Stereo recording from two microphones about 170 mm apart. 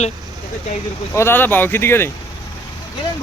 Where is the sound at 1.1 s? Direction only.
15° left (ahead or behind).